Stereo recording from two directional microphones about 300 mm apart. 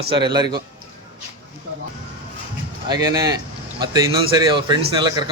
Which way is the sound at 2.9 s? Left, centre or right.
Centre.